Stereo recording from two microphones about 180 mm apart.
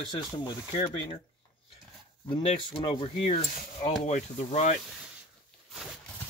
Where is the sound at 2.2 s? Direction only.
30° left (ahead or behind).